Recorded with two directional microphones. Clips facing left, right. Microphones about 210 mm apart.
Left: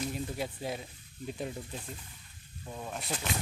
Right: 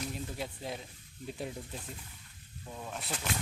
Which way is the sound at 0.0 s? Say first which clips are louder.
Left 3 dB; 5° left (ahead or behind).